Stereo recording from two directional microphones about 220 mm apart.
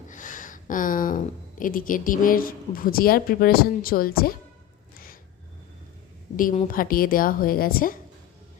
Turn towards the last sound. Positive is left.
turn(degrees=40)  # may be behind; listen again after turning